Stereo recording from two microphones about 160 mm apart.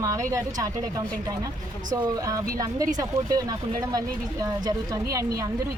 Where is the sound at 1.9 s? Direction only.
25° right (ahead or behind).